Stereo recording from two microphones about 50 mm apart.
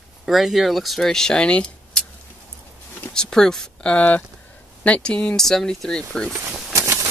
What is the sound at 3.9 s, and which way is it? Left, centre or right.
Speech, left.